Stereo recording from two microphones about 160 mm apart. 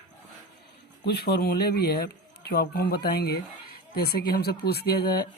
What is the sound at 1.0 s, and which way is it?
Speech, 85° left.